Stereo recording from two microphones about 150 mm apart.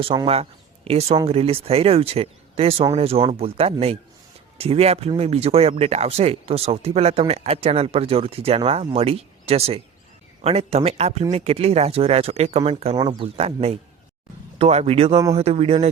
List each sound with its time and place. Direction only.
0.1 s speech: 30° right (ahead or behind)
0.9 s speech: 40° right (ahead or behind)